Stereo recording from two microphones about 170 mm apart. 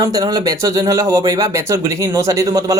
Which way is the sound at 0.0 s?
20° right (ahead or behind).